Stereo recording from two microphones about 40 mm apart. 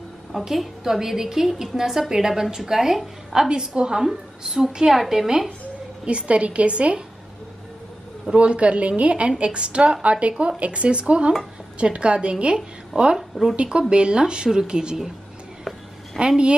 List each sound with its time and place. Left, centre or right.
0.3 s a woman's voice: centre
3.3 s a woman's voice: right
6.0 s a woman's voice: right
8.3 s a woman's voice: right
16.2 s speech: right